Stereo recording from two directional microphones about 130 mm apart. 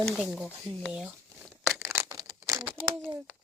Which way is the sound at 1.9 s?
25° right (ahead or behind).